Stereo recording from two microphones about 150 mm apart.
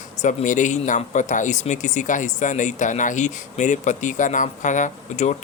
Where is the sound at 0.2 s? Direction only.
55° left (ahead or behind).